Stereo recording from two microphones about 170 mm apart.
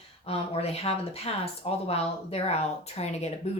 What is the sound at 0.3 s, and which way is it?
A woman's voice, 35° left (ahead or behind).